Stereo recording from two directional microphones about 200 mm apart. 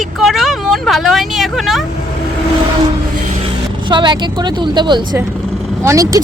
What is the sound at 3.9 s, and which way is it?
Speech, 25° right (ahead or behind).